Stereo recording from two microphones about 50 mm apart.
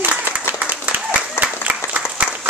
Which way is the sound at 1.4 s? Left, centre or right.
Right.